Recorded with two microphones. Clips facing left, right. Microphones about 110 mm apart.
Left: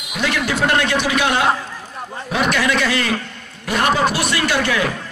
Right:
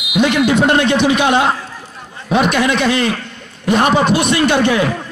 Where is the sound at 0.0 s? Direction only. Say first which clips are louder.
Right 7 dB; 15° right (ahead or behind).